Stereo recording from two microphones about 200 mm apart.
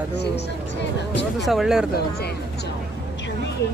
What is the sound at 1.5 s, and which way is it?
Speech, centre (ahead or behind).